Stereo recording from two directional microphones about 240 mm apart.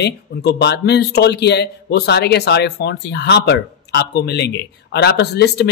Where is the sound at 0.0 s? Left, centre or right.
Left.